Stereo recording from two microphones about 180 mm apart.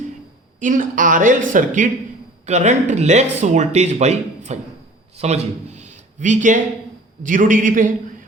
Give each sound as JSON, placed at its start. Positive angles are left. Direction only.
{"t": 0.6, "sound": "a man's voice", "side_deg": -45}